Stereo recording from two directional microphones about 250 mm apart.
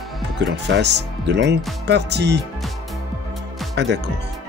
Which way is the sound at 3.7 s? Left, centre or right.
Right.